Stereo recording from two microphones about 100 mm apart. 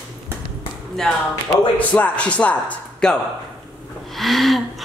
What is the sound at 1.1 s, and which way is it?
Speech, 10° left (ahead or behind).